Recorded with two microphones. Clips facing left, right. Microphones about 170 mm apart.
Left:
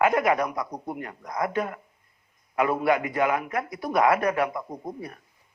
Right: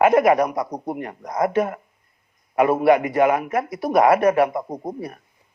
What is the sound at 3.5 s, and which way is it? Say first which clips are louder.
A man's voice: right 6 dB; 40° right (ahead or behind).